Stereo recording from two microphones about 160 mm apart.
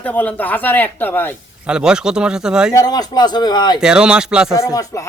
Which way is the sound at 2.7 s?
25° left (ahead or behind).